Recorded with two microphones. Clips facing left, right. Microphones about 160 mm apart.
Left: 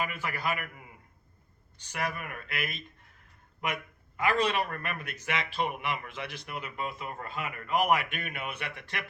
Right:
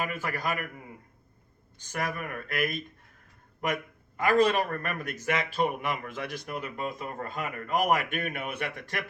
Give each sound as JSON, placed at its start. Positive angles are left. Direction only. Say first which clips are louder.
{"t": 0.0, "sound": "a man's voice", "louder": "right 1 dB", "side_deg": -45}
{"t": 1.8, "sound": "a man's voice", "louder": "right 2 dB", "side_deg": -45}
{"t": 4.2, "sound": "a man's voice", "louder": "right 4 dB", "side_deg": -45}